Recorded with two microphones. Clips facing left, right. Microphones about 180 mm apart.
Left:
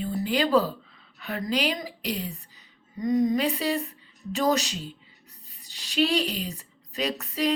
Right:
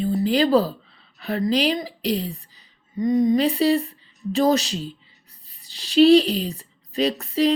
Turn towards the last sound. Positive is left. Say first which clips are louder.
# right 7 dB
turn(degrees=-30)  # may be behind; listen again after turning